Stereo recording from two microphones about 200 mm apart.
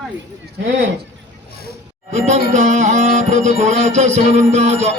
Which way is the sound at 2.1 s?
35° right (ahead or behind).